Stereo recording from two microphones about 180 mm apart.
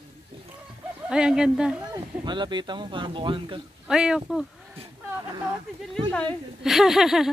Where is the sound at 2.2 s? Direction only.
25° right (ahead or behind).